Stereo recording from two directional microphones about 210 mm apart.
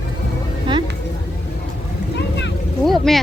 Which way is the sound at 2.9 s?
Centre (ahead or behind).